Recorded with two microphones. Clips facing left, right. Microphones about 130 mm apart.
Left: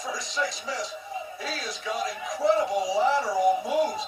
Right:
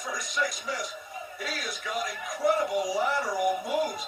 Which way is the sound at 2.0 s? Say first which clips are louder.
Left 1 dB; 25° left (ahead or behind).